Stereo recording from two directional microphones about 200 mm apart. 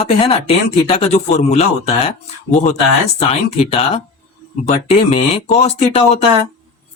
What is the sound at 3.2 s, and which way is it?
Speech, 30° left (ahead or behind).